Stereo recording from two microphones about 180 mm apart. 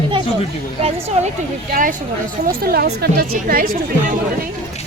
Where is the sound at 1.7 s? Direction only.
45° right (ahead or behind).